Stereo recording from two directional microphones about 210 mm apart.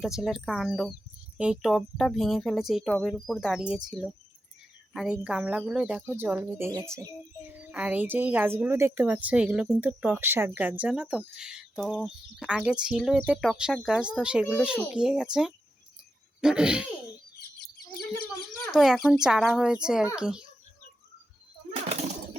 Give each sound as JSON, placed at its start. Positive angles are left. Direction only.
{"t": 0.0, "sound": "speech", "side_deg": 0}
{"t": 18.7, "sound": "speech", "side_deg": 0}
{"t": 21.7, "sound": "a sound", "side_deg": -30}